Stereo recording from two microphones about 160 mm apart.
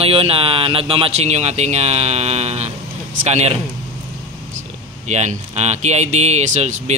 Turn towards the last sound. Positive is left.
turn(degrees=-45)  # may be behind; listen again after turning